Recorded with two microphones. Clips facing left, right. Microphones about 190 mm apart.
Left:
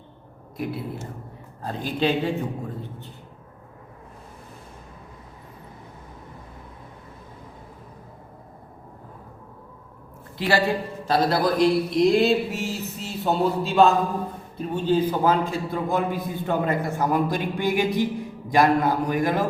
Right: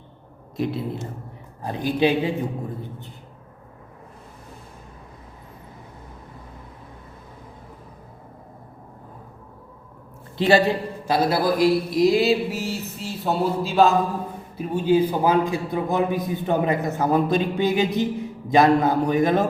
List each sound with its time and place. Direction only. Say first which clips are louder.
0.5 s a man's voice: right 4 dB; 25° right (ahead or behind)
1.6 s a man's voice: right 3 dB; 15° right (ahead or behind)
10.3 s a man's voice: right 4 dB; 20° right (ahead or behind)